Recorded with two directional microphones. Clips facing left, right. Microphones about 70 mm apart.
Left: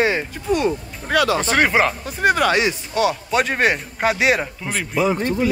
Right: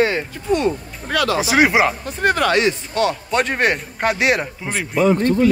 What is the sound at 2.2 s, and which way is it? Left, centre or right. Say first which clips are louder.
Speech: even; centre.